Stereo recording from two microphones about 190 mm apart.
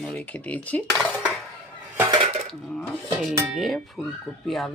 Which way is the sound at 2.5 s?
5° left (ahead or behind).